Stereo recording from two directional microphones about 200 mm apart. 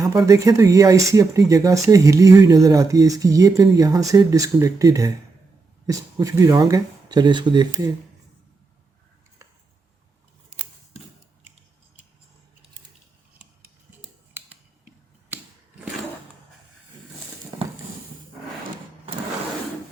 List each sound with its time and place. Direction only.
0.0 s speech: 15° right (ahead or behind)